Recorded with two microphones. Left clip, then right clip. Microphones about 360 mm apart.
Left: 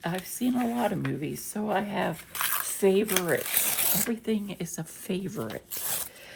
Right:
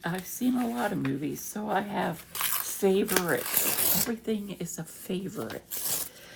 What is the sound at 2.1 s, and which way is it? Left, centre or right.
Dog, centre.